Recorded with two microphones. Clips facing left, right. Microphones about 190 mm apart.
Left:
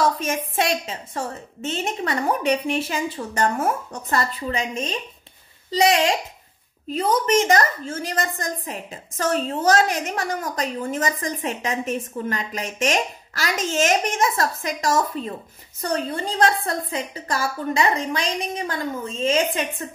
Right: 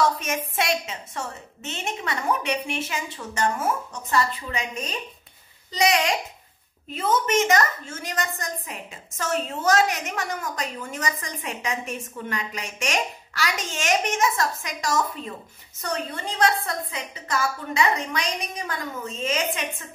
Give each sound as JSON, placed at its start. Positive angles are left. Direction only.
{"t": 0.2, "sound": "a woman's voice", "side_deg": 35}